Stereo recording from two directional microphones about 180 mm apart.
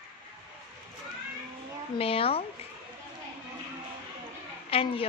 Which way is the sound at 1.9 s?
30° left (ahead or behind).